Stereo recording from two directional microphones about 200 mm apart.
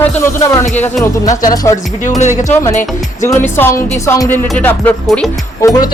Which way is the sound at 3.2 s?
10° left (ahead or behind).